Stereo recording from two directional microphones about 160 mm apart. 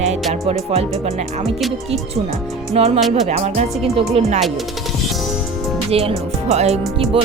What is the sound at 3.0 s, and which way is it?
Speech, centre (ahead or behind).